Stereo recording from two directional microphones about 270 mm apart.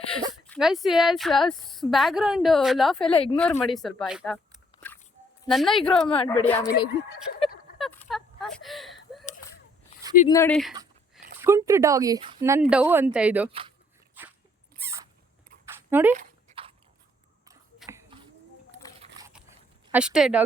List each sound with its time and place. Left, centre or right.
0.4 s a woman's voice: centre
3.1 s a woman's voice: left
3.3 s a woman's voice: centre
5.5 s a woman's voice: centre
6.1 s a woman's voice: centre
6.7 s speech: left
7.8 s a sound: centre
10.2 s speech: centre
11.3 s a woman's voice: centre
13.5 s speech: right
15.6 s a sound: centre
16.1 s dog: right
17.8 s a sound: centre
19.9 s a woman's voice: centre